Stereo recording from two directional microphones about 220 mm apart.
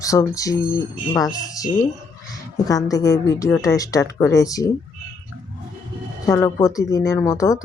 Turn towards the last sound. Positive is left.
turn(degrees=15)  # may be behind; listen again after turning